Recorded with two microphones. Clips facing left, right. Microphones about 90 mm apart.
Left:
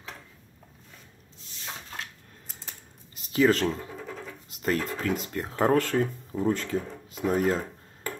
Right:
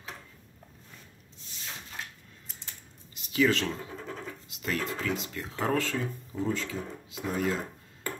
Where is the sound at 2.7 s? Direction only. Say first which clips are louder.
Left 2 dB; 35° left (ahead or behind).